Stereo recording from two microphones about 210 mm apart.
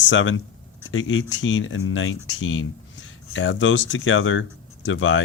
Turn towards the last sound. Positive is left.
turn(degrees=65)  # may be behind; listen again after turning